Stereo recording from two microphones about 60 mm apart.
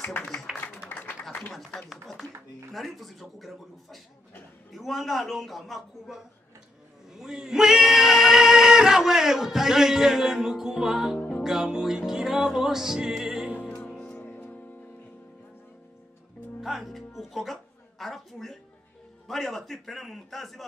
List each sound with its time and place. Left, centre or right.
0.2 s music: centre
0.8 s a sound: centre
2.7 s a man's voice: centre
7.2 s singing: centre
11.1 s music: left
11.4 s music: centre
13.6 s music: left
16.6 s music: centre
19.2 s a man's voice: centre